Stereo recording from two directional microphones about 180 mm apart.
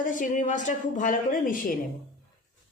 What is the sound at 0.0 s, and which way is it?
A woman's voice, 45° left (ahead or behind).